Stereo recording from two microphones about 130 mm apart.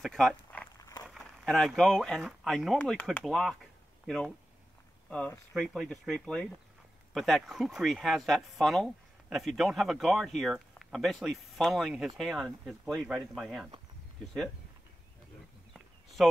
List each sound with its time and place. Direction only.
0.0 s speech: 5° left (ahead or behind)
0.7 s a sound: 25° left (ahead or behind)
1.0 s speech: centre (ahead or behind)
5.5 s speech: centre (ahead or behind)
16.2 s speech: centre (ahead or behind)